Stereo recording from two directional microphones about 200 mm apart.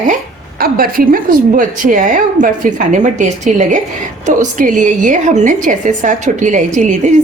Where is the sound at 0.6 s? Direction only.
45° right (ahead or behind).